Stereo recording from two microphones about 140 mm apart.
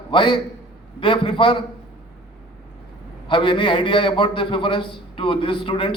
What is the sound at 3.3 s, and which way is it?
A man's voice, 35° left (ahead or behind).